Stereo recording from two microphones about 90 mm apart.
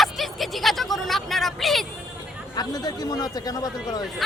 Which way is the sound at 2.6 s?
45° left (ahead or behind).